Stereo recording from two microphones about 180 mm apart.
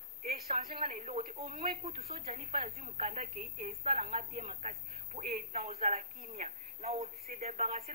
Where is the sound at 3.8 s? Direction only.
35° right (ahead or behind).